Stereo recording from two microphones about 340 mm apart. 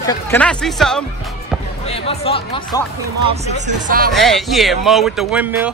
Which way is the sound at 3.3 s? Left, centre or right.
Right.